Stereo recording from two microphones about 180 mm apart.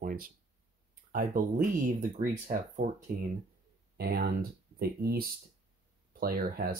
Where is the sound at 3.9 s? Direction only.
60° right (ahead or behind).